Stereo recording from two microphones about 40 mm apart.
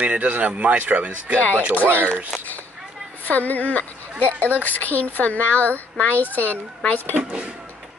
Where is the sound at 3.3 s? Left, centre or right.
Left.